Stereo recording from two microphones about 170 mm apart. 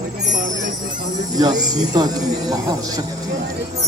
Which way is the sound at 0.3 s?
50° right (ahead or behind).